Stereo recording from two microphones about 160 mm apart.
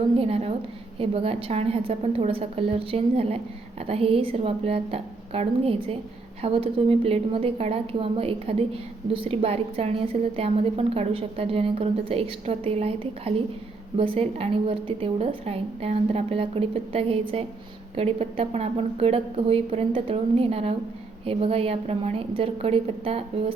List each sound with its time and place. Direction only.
0.2 s a woman's voice: 40° right (ahead or behind)